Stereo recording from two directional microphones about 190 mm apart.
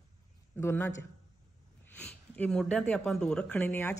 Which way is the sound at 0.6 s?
15° left (ahead or behind).